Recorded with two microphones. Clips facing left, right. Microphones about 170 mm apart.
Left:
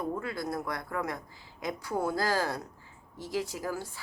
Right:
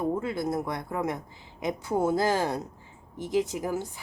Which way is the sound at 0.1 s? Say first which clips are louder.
Right 5 dB; 20° right (ahead or behind).